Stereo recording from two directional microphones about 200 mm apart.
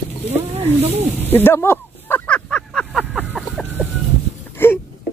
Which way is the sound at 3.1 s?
10° right (ahead or behind).